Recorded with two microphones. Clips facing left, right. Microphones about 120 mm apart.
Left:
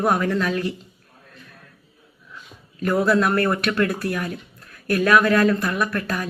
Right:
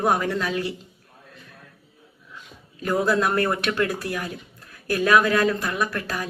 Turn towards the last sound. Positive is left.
turn(degrees=-25)  # may be behind; listen again after turning